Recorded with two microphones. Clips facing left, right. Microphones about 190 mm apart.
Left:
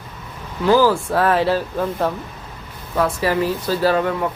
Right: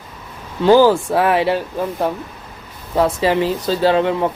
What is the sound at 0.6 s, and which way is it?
Speech, 25° right (ahead or behind).